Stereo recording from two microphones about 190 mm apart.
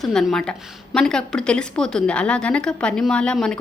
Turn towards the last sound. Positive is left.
turn(degrees=5)  # may be behind; listen again after turning